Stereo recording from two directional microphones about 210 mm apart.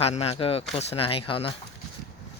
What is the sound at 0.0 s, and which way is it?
Speech, 30° left (ahead or behind).